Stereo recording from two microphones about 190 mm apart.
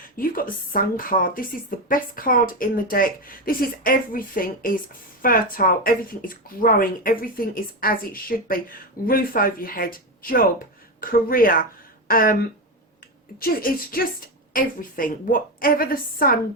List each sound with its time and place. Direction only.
0.2 s speech: 50° left (ahead or behind)